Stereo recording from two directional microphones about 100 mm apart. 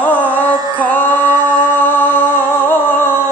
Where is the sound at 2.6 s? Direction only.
20° left (ahead or behind).